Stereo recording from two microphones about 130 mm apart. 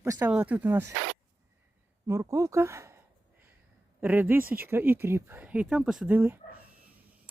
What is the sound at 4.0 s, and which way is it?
Speech, 15° right (ahead or behind).